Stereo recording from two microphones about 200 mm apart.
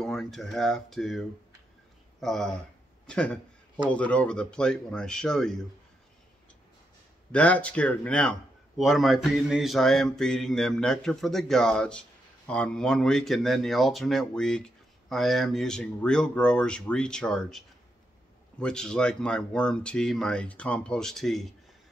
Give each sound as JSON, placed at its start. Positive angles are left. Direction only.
{"t": 0.0, "sound": "a man's voice", "side_deg": 0}
{"t": 7.3, "sound": "speech", "side_deg": 5}